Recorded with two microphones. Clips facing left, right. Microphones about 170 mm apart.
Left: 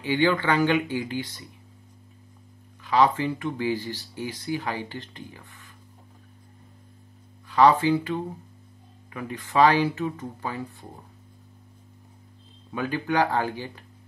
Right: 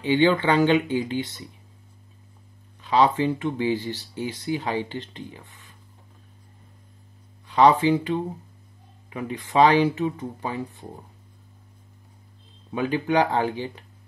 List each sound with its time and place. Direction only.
0.0 s speech: 25° right (ahead or behind)
2.8 s speech: 25° right (ahead or behind)
7.4 s speech: 20° right (ahead or behind)
12.7 s speech: 20° right (ahead or behind)